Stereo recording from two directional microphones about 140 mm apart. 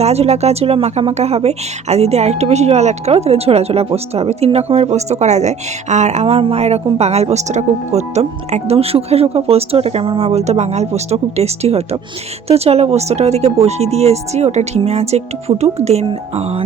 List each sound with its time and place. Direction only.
0.0 s speech: 50° right (ahead or behind)